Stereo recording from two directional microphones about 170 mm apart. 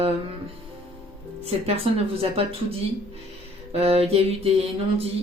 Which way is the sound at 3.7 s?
35° right (ahead or behind).